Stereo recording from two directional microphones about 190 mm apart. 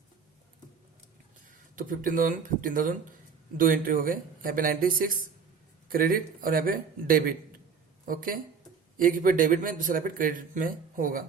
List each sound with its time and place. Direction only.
1.5 s speech: 45° right (ahead or behind)